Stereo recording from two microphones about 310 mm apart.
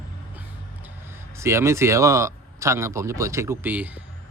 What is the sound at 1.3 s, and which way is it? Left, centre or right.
Speech, centre.